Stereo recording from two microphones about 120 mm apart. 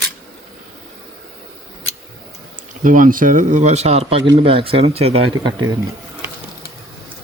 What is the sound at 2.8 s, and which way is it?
Speech, 90° right.